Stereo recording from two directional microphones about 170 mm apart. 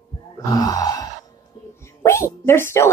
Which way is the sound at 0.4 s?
20° left (ahead or behind).